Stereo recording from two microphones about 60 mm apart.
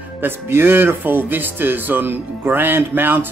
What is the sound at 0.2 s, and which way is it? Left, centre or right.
Speech, right.